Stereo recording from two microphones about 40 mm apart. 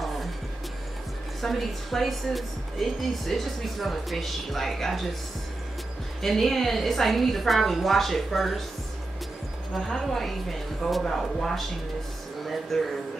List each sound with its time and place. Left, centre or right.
1.4 s a woman's voice: centre
6.2 s a woman's voice: centre
9.9 s a woman's voice: centre
12.7 s speech: centre